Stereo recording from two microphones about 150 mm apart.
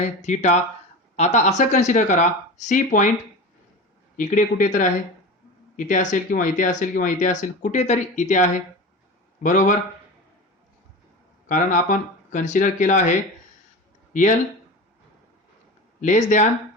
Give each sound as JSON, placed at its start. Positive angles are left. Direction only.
{"t": 0.2, "sound": "speech", "side_deg": 50}
{"t": 4.2, "sound": "speech", "side_deg": 55}
{"t": 11.4, "sound": "speech", "side_deg": 60}
{"t": 16.0, "sound": "speech", "side_deg": 55}